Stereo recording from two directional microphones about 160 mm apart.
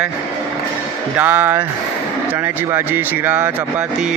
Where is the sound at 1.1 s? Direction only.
10° right (ahead or behind).